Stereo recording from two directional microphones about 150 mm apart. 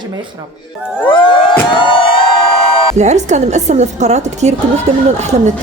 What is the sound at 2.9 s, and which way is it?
A woman's voice, 50° right (ahead or behind).